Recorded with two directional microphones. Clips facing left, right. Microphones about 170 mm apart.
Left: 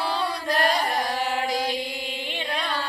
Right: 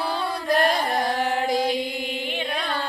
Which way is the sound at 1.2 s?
50° right (ahead or behind).